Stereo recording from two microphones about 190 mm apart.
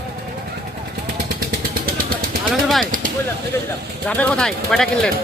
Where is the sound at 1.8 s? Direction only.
50° right (ahead or behind).